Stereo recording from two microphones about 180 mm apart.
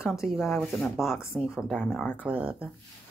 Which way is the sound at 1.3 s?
5° right (ahead or behind).